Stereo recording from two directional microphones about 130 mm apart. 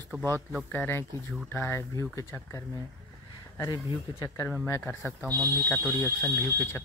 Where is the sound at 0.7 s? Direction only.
15° left (ahead or behind).